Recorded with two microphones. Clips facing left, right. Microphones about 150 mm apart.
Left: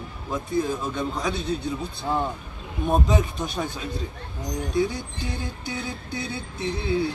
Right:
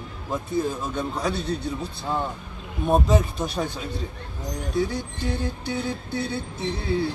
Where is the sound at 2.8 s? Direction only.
Centre (ahead or behind).